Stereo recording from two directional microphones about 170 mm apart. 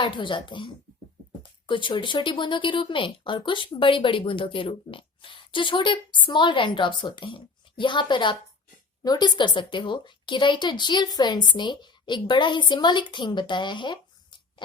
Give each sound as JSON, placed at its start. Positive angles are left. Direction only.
{"t": 0.0, "sound": "speech", "side_deg": 30}